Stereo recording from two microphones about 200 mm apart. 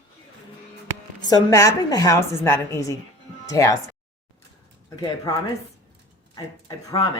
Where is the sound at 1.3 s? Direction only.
15° left (ahead or behind).